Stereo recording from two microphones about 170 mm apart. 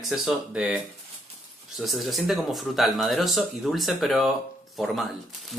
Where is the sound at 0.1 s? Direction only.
5° right (ahead or behind).